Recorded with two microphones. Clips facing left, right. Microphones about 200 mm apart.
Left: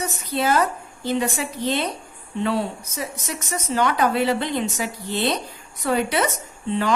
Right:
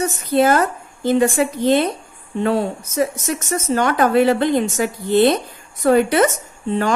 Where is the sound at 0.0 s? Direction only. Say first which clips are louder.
Right 8 dB; 50° right (ahead or behind).